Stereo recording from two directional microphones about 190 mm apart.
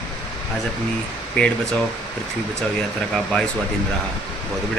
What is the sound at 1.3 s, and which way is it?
Speech, 5° left (ahead or behind).